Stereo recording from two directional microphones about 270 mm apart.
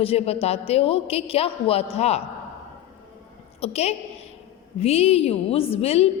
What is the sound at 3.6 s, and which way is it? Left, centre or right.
A woman's voice, left.